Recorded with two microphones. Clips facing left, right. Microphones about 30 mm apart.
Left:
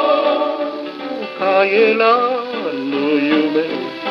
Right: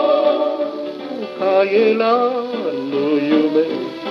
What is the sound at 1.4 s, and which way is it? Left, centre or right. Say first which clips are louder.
Music: left 1 dB; centre.